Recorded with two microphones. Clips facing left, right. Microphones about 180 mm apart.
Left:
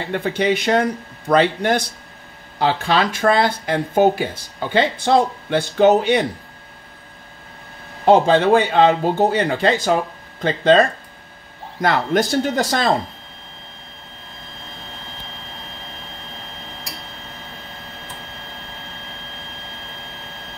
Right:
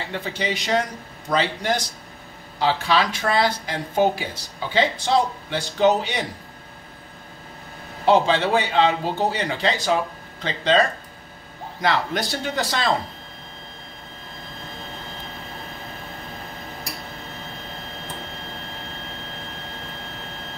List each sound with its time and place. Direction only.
0.1 s speech: 55° left (ahead or behind)
8.0 s speech: 50° left (ahead or behind)